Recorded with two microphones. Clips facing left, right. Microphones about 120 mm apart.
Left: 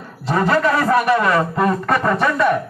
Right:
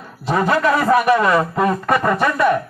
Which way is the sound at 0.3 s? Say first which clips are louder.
Even; 15° right (ahead or behind).